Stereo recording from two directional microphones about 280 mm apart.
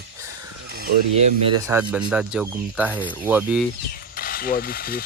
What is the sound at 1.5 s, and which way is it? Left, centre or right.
Speech, centre.